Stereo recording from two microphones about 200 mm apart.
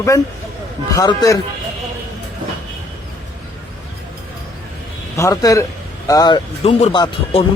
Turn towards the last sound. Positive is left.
turn(degrees=30)  # may be behind; listen again after turning